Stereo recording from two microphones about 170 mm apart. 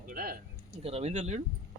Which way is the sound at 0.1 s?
60° right (ahead or behind).